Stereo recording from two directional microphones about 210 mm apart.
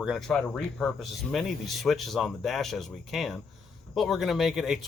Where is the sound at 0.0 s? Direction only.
Centre (ahead or behind).